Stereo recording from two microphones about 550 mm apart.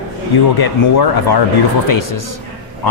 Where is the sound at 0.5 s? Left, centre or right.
Left.